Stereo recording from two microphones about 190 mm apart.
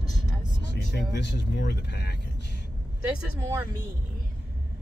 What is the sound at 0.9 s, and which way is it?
Speech, 65° left (ahead or behind).